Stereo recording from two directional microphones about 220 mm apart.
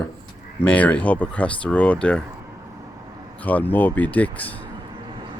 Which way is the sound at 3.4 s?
5° left (ahead or behind).